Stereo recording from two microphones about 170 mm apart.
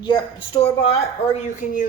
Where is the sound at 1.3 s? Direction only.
45° left (ahead or behind).